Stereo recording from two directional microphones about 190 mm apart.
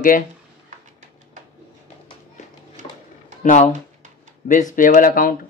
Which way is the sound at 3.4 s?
40° left (ahead or behind).